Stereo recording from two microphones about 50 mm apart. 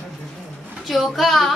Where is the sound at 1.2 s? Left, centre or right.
Centre.